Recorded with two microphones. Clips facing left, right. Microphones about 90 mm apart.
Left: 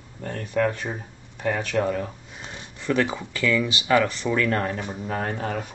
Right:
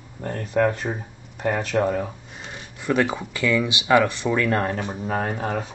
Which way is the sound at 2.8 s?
15° right (ahead or behind).